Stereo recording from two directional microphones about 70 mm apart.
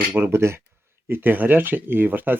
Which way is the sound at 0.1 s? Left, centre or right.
Right.